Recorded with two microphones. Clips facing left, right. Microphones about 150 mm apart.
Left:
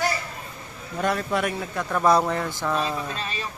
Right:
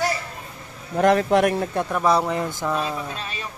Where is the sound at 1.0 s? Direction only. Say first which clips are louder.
Right 8 dB; 70° right (ahead or behind).